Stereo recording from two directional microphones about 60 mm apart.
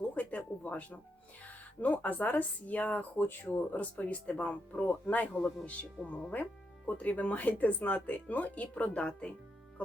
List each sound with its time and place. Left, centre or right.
0.1 s a sound: left
1.8 s speech: left
5.3 s speech: centre
5.6 s speech: centre